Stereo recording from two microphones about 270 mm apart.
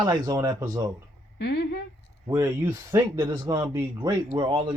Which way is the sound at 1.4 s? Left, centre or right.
Left.